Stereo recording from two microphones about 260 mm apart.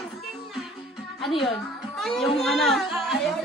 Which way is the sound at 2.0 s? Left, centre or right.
Centre.